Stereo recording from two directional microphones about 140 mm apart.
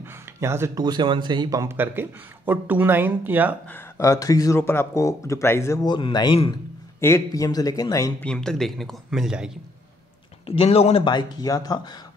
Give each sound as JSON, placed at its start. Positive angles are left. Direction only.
{"t": 0.0, "sound": "a sound", "side_deg": -20}
{"t": 0.8, "sound": "a man's voice", "side_deg": -35}
{"t": 3.7, "sound": "speech", "side_deg": 20}
{"t": 5.9, "sound": "speech", "side_deg": 35}
{"t": 7.0, "sound": "speech", "side_deg": 20}
{"t": 8.2, "sound": "speech", "side_deg": 5}
{"t": 10.4, "sound": "speech", "side_deg": 45}